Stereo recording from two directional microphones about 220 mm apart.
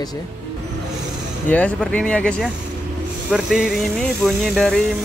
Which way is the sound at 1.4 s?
5° left (ahead or behind).